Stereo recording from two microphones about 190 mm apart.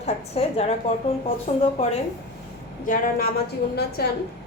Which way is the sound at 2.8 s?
45° left (ahead or behind).